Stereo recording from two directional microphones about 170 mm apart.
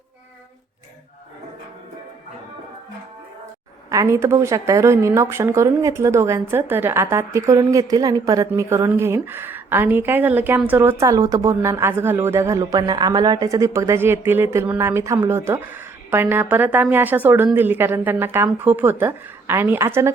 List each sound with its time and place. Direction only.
3.8 s speech: 20° right (ahead or behind)